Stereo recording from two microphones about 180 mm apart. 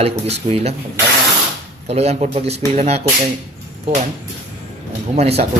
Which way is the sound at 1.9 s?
35° right (ahead or behind).